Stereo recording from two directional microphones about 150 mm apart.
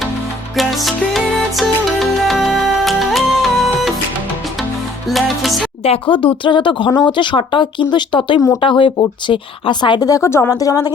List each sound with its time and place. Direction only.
0.5 s music: centre (ahead or behind)
5.0 s music: centre (ahead or behind)
5.8 s speech: 40° left (ahead or behind)